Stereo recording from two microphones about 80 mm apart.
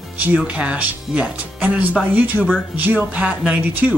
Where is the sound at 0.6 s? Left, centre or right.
Centre.